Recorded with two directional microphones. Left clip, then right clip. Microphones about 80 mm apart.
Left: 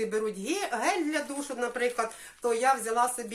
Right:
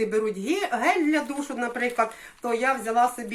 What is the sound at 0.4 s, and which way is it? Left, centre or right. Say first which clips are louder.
Speech: right 6 dB; left.